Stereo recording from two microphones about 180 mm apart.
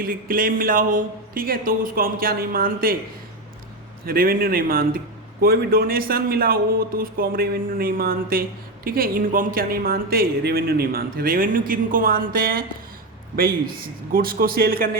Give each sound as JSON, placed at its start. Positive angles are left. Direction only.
{"t": 0.0, "sound": "speech", "side_deg": -50}
{"t": 4.0, "sound": "a man's voice", "side_deg": -55}